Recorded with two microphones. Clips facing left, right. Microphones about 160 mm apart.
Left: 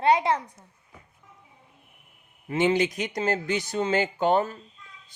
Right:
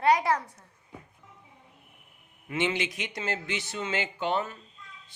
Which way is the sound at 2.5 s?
40° left (ahead or behind).